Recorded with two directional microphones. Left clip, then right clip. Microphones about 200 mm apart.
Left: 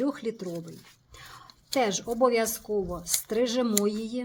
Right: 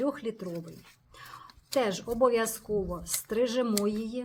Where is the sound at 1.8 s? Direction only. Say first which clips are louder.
Left 2 dB; 25° left (ahead or behind).